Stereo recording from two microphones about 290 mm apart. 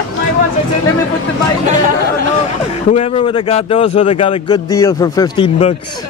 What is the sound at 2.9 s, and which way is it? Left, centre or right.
Speech, centre.